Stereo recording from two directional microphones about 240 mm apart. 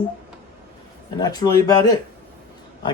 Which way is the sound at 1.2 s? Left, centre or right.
Centre.